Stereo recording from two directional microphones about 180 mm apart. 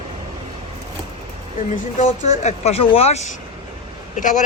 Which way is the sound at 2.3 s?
40° left (ahead or behind).